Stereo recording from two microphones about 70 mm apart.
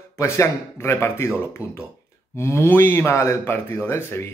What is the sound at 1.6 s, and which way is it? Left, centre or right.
Speech, left.